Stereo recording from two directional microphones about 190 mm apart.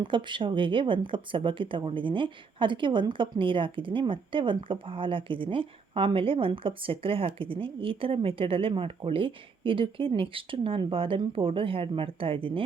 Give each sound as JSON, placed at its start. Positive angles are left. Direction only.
{"t": 0.0, "sound": "speech", "side_deg": -25}